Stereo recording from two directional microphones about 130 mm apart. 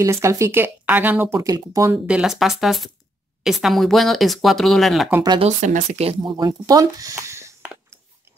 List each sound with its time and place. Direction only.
0.0 s speech: 20° right (ahead or behind)
2.0 s speech: 5° right (ahead or behind)
5.4 s speech: 70° right (ahead or behind)
6.0 s speech: 40° right (ahead or behind); by 7.5 s 20° right (ahead or behind)